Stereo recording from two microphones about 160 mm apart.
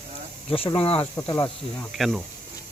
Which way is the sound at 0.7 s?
35° left (ahead or behind).